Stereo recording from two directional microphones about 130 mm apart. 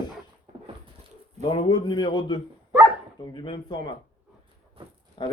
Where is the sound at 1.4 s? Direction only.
35° left (ahead or behind).